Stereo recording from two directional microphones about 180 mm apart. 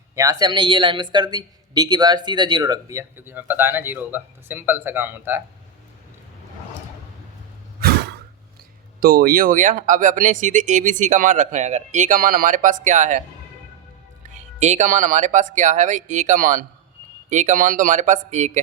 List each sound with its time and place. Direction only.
0.2 s speech: 20° right (ahead or behind)
7.8 s a sound: 60° right (ahead or behind)
9.0 s speech: 55° right (ahead or behind)
14.3 s speech: 40° right (ahead or behind)